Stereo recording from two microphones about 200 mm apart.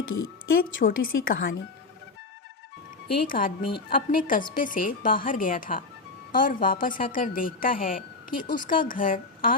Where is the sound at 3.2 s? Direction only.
45° left (ahead or behind).